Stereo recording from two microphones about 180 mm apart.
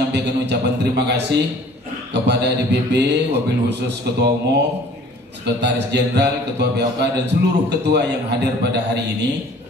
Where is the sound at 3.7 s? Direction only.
70° right (ahead or behind).